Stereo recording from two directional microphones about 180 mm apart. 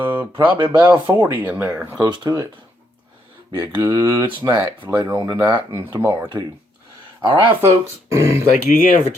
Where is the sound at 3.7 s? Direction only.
25° right (ahead or behind).